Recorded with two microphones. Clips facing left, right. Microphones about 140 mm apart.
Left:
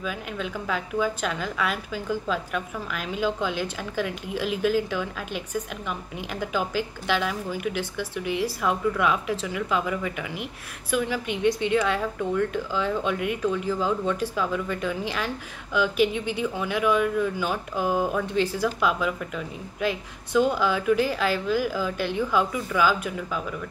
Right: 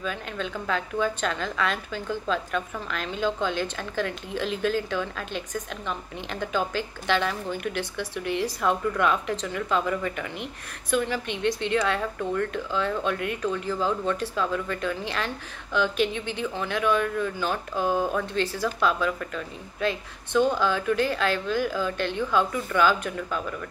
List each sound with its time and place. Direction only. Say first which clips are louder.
0.0 s a woman's voice: even; 10° left (ahead or behind)